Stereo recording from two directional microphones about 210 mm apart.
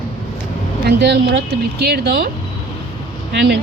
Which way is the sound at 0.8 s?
55° right (ahead or behind).